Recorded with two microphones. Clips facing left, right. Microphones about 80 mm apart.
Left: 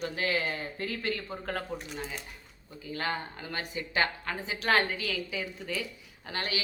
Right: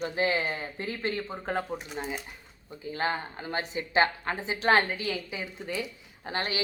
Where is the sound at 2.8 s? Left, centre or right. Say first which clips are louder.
Right 3 dB; right.